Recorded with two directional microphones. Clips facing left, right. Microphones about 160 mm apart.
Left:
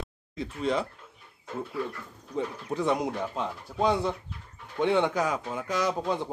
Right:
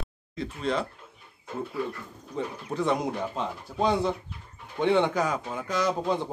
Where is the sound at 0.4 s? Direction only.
15° left (ahead or behind).